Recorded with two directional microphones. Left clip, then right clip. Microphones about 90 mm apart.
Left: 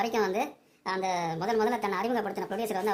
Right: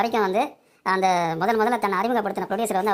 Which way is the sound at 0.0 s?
45° right (ahead or behind).